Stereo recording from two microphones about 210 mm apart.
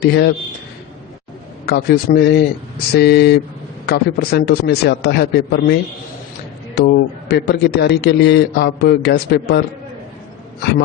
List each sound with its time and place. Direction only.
0.0 s a man's voice: 50° left (ahead or behind)
1.6 s a man's voice: 50° left (ahead or behind)
6.7 s a man's voice: 50° left (ahead or behind)